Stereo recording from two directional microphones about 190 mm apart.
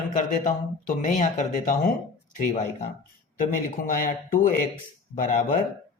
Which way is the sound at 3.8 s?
45° left (ahead or behind).